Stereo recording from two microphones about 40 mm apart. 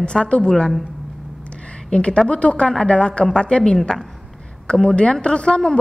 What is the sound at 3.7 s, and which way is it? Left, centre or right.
Speech, centre.